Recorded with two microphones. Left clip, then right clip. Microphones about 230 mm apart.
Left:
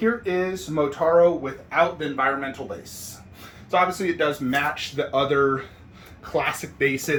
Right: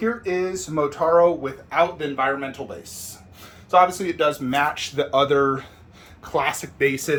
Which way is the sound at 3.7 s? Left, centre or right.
Centre.